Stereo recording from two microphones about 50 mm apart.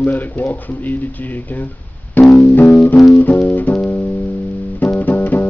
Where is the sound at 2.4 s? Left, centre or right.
Left.